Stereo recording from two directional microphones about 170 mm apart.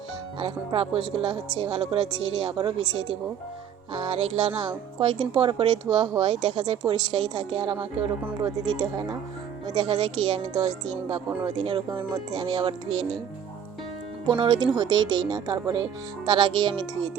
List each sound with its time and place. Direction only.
0.3 s a woman's voice: 35° right (ahead or behind)
8.4 s speech: 20° right (ahead or behind)
14.3 s speech: 25° right (ahead or behind)